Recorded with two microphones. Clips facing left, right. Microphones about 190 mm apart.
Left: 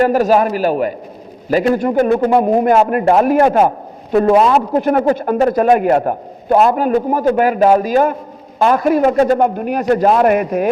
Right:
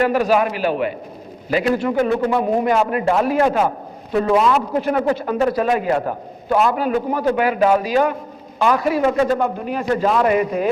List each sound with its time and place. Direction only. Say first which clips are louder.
0.0 s a man's voice: left 4 dB; 40° left (ahead or behind)